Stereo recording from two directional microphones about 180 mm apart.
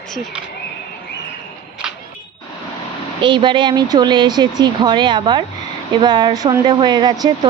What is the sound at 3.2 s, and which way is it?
Speech, 25° right (ahead or behind).